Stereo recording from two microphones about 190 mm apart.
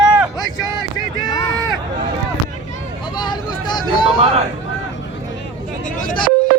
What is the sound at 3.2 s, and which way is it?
Vehicle, 20° left (ahead or behind).